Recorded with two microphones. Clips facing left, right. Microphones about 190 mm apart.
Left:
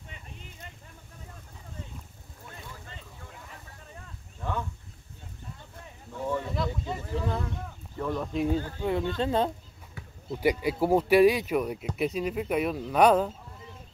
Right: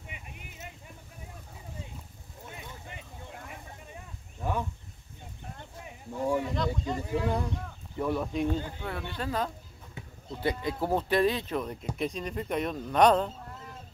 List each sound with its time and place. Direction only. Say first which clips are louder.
0.0 s a sound: even; 10° right (ahead or behind)
2.5 s boat: even; 20° right (ahead or behind)
3.8 s a sound: right 1 dB; 15° right (ahead or behind)
6.5 s speech: right 1 dB; 5° left (ahead or behind)
7.0 s speech: right 3 dB; 15° right (ahead or behind)
8.5 s speech: left 3 dB; 15° right (ahead or behind)
8.8 s speech: left 8 dB; 20° left (ahead or behind)
10.0 s a sound: right 1 dB; 20° right (ahead or behind)
10.4 s speech: left 5 dB; 10° left (ahead or behind)